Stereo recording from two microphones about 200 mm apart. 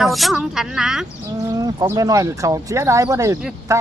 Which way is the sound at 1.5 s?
20° right (ahead or behind).